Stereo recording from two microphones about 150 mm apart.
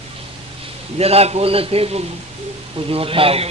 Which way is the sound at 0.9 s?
45° right (ahead or behind).